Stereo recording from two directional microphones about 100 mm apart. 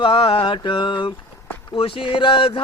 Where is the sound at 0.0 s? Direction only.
55° left (ahead or behind).